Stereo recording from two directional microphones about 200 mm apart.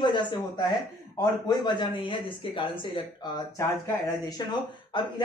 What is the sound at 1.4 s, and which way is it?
Speech, 25° left (ahead or behind).